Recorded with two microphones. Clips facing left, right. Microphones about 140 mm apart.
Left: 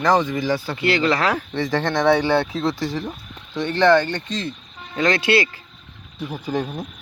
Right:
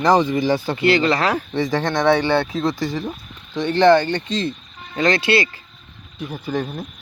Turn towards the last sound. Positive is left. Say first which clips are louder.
# even
turn(degrees=10)  # may be behind; listen again after turning